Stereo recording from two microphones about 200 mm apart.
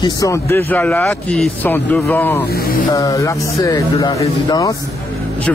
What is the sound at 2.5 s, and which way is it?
Speech, 50° left (ahead or behind).